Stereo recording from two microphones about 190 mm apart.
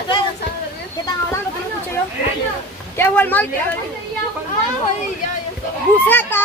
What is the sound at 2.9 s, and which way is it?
Speech, 10° left (ahead or behind).